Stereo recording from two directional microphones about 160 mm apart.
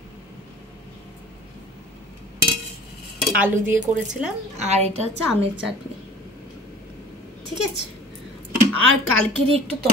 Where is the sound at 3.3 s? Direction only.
10° right (ahead or behind).